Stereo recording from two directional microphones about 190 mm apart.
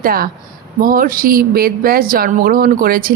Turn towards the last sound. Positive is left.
turn(degrees=-50)  # may be behind; listen again after turning